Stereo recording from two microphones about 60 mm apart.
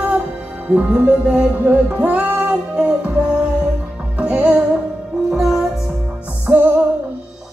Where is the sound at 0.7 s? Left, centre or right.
Right.